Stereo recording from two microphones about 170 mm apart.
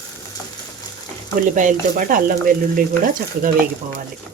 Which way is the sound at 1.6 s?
50° right (ahead or behind).